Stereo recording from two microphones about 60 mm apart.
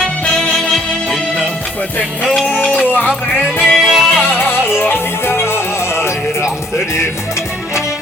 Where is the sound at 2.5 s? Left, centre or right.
Left.